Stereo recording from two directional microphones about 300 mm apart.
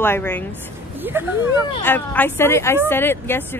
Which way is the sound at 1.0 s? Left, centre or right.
Centre.